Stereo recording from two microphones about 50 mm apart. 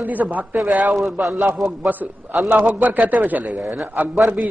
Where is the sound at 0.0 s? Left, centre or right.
Right.